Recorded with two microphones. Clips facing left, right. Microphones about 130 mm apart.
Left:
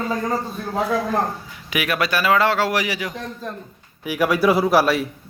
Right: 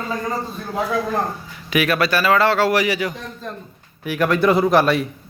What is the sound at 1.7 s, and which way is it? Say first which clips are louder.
A man's voice: right 3 dB; 15° left (ahead or behind).